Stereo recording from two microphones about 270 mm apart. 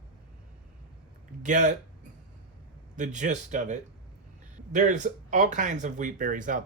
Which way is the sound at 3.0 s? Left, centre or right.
Right.